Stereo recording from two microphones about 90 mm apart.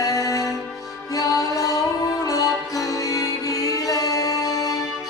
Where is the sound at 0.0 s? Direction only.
40° left (ahead or behind).